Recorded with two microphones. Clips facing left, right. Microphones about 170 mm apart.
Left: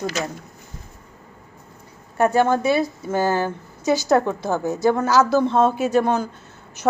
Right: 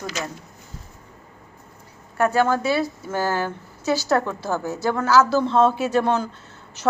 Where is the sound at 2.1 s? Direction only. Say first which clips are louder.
Left 2 dB; 20° left (ahead or behind).